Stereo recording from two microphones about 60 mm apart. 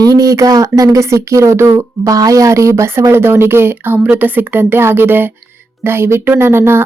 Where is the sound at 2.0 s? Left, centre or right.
Right.